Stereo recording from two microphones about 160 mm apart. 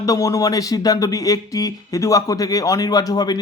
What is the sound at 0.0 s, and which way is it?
Speech, 20° left (ahead or behind).